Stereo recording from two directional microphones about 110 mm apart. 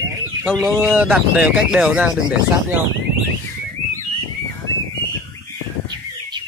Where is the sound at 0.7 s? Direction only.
10° right (ahead or behind).